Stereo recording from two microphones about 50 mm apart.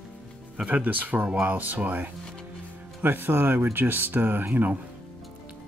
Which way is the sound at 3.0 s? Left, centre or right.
Right.